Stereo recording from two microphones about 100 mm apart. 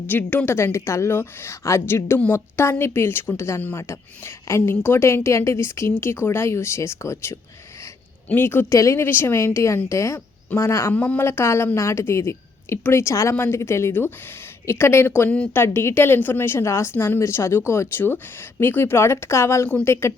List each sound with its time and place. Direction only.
0.1 s speech: 20° left (ahead or behind)
10.9 s a woman's voice: 15° left (ahead or behind)